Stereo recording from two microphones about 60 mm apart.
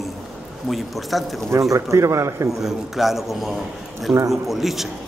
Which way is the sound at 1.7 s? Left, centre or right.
Right.